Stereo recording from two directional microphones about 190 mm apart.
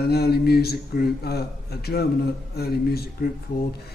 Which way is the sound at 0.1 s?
55° left (ahead or behind).